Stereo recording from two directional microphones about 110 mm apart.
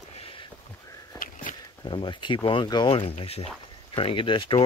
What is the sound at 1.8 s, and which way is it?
Speech, 45° left (ahead or behind).